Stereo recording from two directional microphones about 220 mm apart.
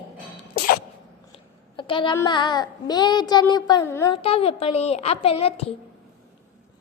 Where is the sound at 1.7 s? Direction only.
20° left (ahead or behind).